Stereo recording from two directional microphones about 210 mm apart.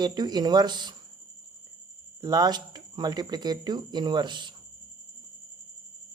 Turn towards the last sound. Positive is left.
turn(degrees=-20)  # may be behind; listen again after turning